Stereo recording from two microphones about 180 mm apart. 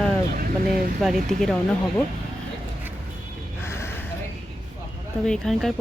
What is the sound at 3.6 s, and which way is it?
Gasp, 15° left (ahead or behind).